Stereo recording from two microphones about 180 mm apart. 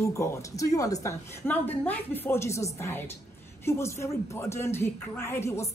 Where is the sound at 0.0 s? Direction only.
15° left (ahead or behind).